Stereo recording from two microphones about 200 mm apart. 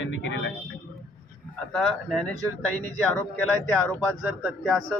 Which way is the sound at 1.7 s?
Centre (ahead or behind).